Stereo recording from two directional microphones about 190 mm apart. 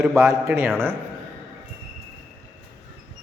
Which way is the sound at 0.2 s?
15° right (ahead or behind).